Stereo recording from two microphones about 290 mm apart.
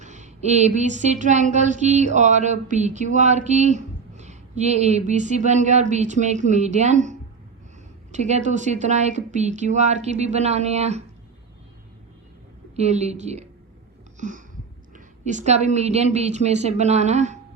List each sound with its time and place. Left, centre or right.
0.0 s speech: right
12.7 s speech: right
14.2 s a sound: right
14.9 s speech: right